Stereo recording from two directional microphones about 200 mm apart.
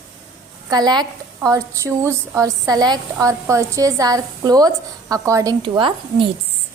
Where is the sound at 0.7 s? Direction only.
20° right (ahead or behind).